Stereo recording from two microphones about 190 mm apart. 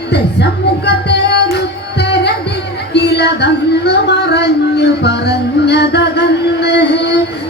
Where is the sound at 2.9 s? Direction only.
60° left (ahead or behind).